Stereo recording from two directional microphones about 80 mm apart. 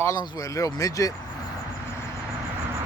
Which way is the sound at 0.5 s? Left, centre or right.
Left.